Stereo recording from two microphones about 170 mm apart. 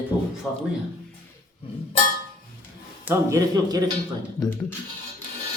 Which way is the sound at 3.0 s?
15° right (ahead or behind).